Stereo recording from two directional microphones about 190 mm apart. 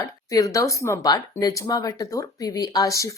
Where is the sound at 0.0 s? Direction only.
20° left (ahead or behind).